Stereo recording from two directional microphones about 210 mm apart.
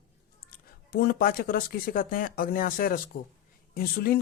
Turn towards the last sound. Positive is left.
turn(degrees=45)  # may be behind; listen again after turning